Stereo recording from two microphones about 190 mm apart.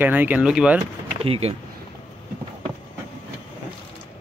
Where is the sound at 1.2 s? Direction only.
30° right (ahead or behind).